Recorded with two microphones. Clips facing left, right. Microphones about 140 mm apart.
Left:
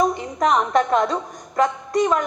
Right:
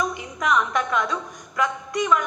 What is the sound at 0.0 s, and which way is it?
A woman's voice, 35° left (ahead or behind).